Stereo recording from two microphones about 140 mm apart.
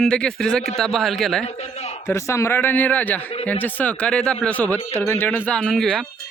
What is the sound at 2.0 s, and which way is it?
Speech, 20° left (ahead or behind).